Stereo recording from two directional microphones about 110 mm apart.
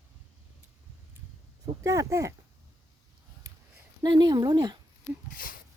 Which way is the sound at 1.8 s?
30° right (ahead or behind).